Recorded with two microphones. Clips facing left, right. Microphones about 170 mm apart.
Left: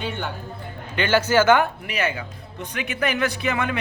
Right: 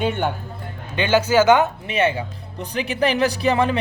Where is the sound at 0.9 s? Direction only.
15° right (ahead or behind); by 3.7 s 35° right (ahead or behind).